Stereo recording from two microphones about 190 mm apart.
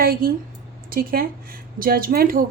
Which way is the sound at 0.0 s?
50° right (ahead or behind).